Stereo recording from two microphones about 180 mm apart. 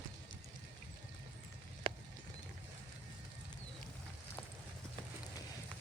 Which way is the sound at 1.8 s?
30° right (ahead or behind).